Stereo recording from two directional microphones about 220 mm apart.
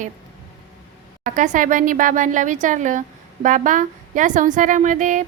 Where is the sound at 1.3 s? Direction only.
35° right (ahead or behind).